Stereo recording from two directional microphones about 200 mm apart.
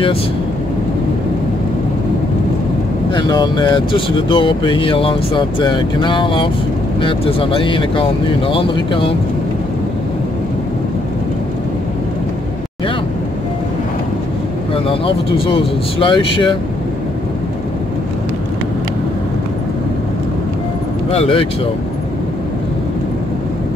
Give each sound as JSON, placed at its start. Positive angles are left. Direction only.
{"t": 3.2, "sound": "speech", "side_deg": 20}
{"t": 14.7, "sound": "speech", "side_deg": 25}
{"t": 21.1, "sound": "speech", "side_deg": 30}